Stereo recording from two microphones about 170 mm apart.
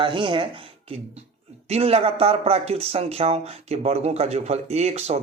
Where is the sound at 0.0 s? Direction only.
30° right (ahead or behind).